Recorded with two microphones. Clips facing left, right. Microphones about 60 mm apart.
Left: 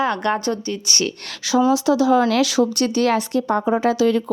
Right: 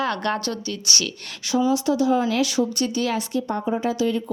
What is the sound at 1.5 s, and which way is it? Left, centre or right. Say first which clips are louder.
Speech: left 4 dB; left.